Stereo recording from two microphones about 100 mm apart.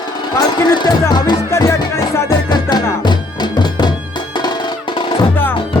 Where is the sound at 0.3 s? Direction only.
40° left (ahead or behind).